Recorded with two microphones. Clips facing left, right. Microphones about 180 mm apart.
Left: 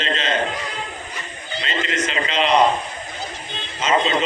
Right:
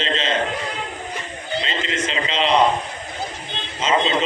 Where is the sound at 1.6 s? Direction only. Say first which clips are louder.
Left 1 dB; 30° right (ahead or behind).